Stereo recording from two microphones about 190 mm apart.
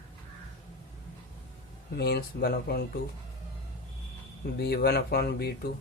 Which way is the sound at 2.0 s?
55° left (ahead or behind).